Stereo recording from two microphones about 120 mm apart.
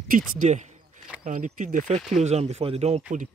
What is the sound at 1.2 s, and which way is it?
Speech, 90° right.